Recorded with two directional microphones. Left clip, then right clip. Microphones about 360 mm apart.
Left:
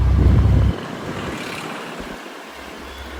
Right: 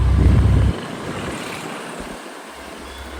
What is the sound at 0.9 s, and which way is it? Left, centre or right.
Vehicle, centre.